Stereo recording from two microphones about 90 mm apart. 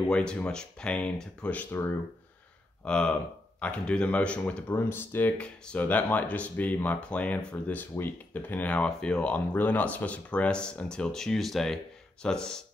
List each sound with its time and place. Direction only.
0.1 s speech: 10° left (ahead or behind)
2.8 s speech: 10° left (ahead or behind)